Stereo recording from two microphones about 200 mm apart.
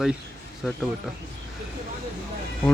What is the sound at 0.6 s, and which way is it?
Speech, centre (ahead or behind).